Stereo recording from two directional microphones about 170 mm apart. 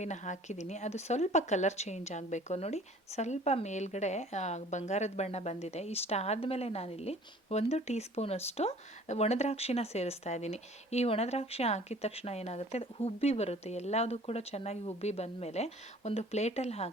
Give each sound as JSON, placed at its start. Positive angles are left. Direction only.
{"t": 0.0, "sound": "a woman's voice", "side_deg": 45}